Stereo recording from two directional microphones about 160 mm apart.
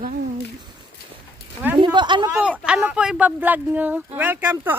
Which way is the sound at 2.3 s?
5° right (ahead or behind).